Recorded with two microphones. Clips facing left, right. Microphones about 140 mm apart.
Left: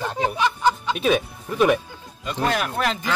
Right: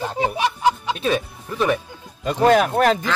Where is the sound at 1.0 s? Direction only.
10° left (ahead or behind).